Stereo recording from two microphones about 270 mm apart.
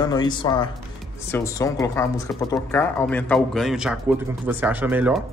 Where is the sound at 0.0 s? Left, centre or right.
Centre.